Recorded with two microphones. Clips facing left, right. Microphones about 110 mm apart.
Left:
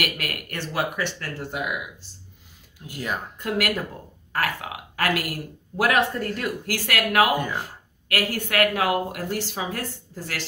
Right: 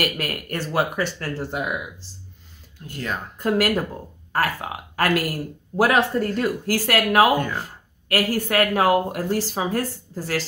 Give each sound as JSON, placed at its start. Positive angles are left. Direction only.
{"t": 0.0, "sound": "speech", "side_deg": -35}
{"t": 2.9, "sound": "speech", "side_deg": 10}
{"t": 3.3, "sound": "speech", "side_deg": -35}
{"t": 7.3, "sound": "speech", "side_deg": 10}
{"t": 7.6, "sound": "speech", "side_deg": -35}